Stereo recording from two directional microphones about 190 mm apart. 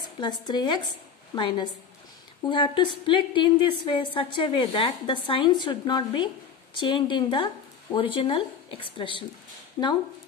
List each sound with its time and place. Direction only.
0.2 s a woman's voice: 25° left (ahead or behind)